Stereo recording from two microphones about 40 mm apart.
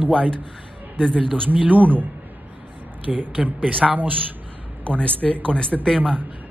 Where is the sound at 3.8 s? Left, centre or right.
Right.